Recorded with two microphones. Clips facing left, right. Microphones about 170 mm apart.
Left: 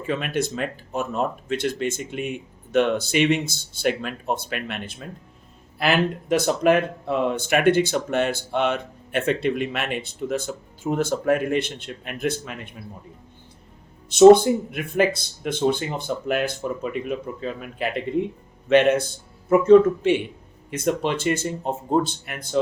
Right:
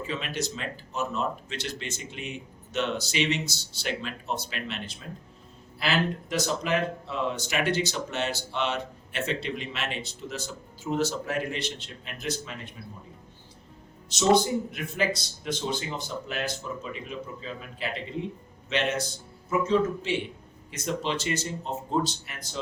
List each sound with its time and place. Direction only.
0.1 s speech: 55° left (ahead or behind)
14.1 s speech: 55° left (ahead or behind)